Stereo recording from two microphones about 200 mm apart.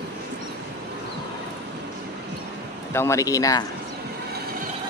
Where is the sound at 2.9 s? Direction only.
15° left (ahead or behind).